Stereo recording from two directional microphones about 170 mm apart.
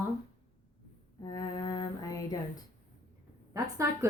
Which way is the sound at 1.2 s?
25° left (ahead or behind).